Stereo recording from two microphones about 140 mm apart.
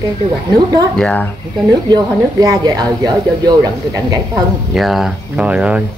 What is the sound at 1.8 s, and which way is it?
Speech, 25° right (ahead or behind).